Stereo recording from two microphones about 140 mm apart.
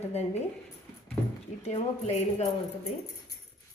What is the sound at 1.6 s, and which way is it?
A woman's voice, 50° left (ahead or behind).